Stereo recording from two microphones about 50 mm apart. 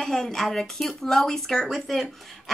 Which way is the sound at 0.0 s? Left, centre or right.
Centre.